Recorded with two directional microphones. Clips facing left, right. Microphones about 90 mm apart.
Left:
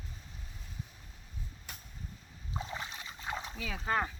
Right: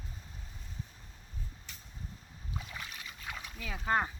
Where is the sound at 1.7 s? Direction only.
50° left (ahead or behind).